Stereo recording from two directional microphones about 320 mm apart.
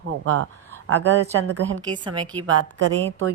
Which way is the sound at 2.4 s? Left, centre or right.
Right.